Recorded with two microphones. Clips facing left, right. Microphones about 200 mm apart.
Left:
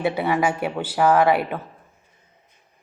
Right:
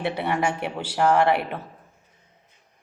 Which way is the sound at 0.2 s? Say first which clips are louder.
Left 3 dB; centre (ahead or behind).